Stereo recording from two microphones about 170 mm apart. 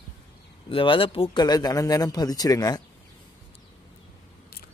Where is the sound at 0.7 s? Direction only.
30° left (ahead or behind).